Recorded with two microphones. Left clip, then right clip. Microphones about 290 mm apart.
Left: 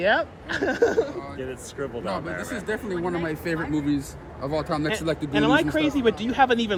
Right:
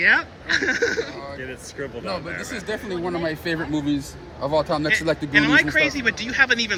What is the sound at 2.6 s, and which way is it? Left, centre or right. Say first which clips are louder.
A man's voice: even; centre.